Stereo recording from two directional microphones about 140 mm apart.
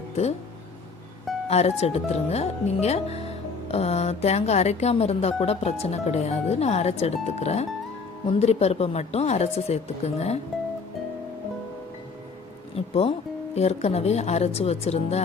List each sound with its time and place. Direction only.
1.5 s a woman's voice: 50° left (ahead or behind)
12.7 s a woman's voice: 45° left (ahead or behind)